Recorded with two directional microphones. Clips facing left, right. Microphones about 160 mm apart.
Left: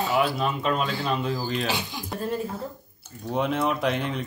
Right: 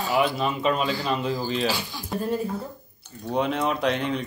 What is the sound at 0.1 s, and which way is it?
Speech, centre (ahead or behind).